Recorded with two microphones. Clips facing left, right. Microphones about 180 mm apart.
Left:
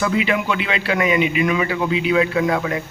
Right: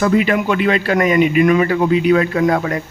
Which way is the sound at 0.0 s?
45° right (ahead or behind).